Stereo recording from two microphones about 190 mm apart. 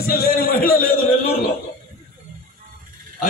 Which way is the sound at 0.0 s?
55° left (ahead or behind).